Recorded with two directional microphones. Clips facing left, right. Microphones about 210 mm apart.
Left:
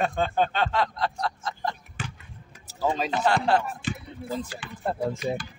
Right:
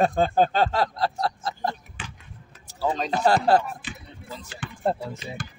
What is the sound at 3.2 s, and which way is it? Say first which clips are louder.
Speech: right 4 dB; 40° right (ahead or behind).